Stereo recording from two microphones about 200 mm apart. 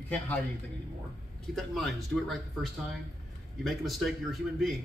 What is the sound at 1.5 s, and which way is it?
Speech, centre (ahead or behind).